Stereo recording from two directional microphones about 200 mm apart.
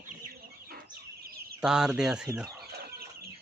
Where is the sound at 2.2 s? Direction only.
15° right (ahead or behind).